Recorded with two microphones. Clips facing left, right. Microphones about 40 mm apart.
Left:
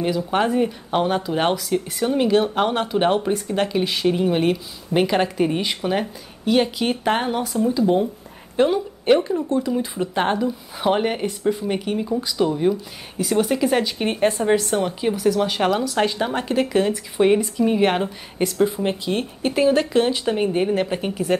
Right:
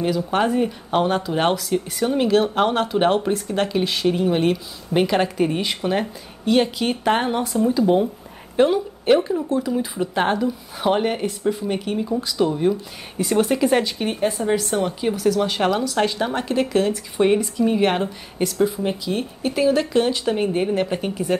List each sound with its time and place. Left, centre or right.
0.0 s a woman's voice: centre
18.7 s speech: left
19.5 s a woman's voice: centre